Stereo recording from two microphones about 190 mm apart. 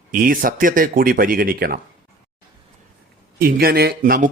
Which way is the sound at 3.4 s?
50° right (ahead or behind).